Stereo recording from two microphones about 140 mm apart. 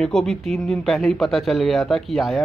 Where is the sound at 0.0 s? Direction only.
5° left (ahead or behind).